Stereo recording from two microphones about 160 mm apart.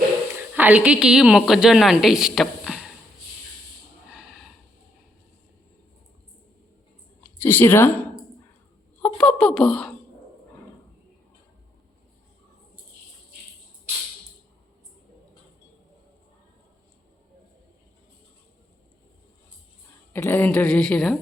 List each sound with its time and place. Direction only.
0.3 s a woman's voice: 10° right (ahead or behind)
4.1 s a sound: 5° right (ahead or behind)
7.4 s a woman's voice: 10° left (ahead or behind)
9.1 s speech: 5° left (ahead or behind)
20.1 s a woman's voice: 15° left (ahead or behind)